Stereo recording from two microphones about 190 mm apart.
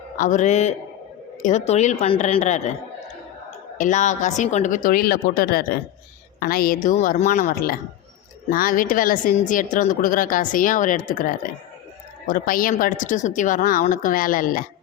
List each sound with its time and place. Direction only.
0.2 s a woman's voice: 40° left (ahead or behind)
3.8 s a woman's voice: 40° left (ahead or behind)